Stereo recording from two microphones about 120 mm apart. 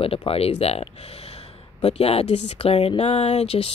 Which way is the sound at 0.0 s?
50° left (ahead or behind).